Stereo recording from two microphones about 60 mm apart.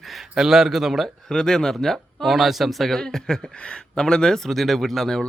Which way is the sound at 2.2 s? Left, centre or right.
Centre.